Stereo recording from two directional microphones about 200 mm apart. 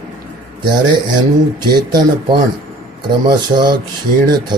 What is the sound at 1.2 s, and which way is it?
Speech, 20° right (ahead or behind).